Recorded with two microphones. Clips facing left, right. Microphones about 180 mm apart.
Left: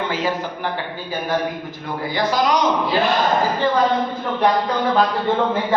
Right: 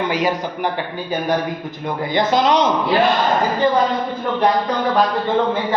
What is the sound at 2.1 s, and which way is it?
Speech, 25° right (ahead or behind).